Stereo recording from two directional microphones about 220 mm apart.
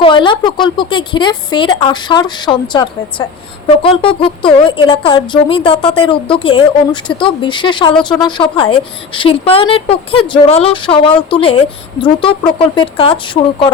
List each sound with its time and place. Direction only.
0.0 s speech: 20° left (ahead or behind)